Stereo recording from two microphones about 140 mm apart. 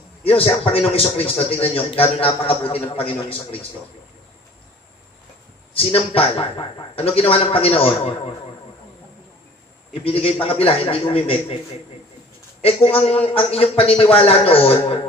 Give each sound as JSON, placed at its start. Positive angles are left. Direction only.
{"t": 0.2, "sound": "a man's voice", "side_deg": 40}
{"t": 5.8, "sound": "a man's voice", "side_deg": 40}
{"t": 10.0, "sound": "speech", "side_deg": 45}
{"t": 12.6, "sound": "speech", "side_deg": 45}